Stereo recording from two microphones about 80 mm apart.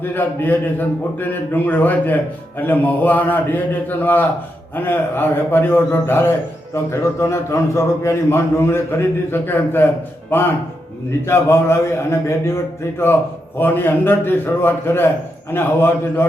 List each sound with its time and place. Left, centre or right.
0.0 s a man's voice: left